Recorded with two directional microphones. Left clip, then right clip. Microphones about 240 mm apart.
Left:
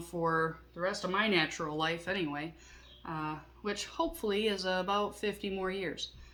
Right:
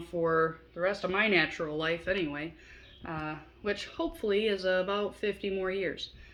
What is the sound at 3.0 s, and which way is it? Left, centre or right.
Speech, left.